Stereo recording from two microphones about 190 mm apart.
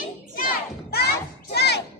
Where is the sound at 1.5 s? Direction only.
60° left (ahead or behind).